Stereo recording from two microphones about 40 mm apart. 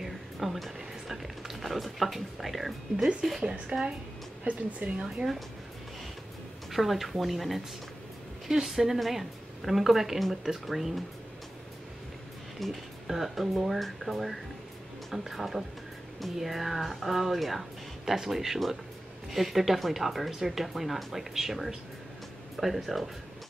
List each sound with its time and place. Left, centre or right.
0.0 s music: centre
0.7 s a sound: centre
1.6 s speech: centre
4.5 s speech: right
5.0 s a woman's voice: centre
6.7 s a woman's voice: centre
12.6 s speech: centre
13.0 s speech: centre
22.6 s speech: centre